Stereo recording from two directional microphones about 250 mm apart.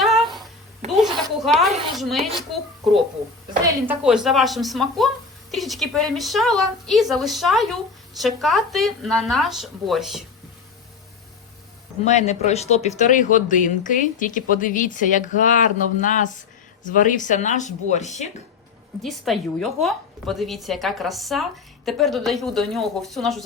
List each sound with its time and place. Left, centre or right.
0.0 s a sound: centre
2.0 s speech: centre
3.6 s a woman's voice: centre
4.0 s a woman's voice: centre
12.0 s a woman's voice: left
19.0 s a woman's voice: centre